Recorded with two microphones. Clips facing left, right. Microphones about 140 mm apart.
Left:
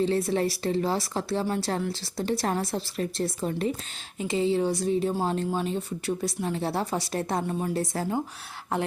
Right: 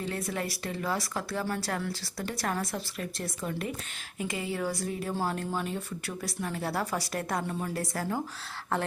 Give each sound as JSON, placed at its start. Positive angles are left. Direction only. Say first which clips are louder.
{"t": 0.0, "sound": "a woman's voice", "louder": "left 9 dB", "side_deg": 30}